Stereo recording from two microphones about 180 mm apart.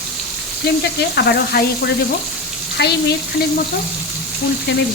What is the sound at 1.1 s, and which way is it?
Frying, 65° left (ahead or behind).